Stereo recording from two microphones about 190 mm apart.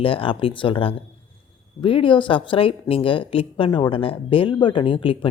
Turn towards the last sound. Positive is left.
turn(degrees=30)  # may be behind; listen again after turning